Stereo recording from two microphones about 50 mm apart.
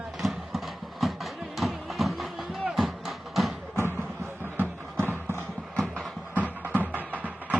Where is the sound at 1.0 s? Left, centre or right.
Centre.